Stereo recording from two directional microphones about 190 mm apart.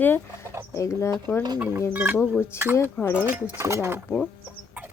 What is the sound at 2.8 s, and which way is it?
Speech, 10° left (ahead or behind).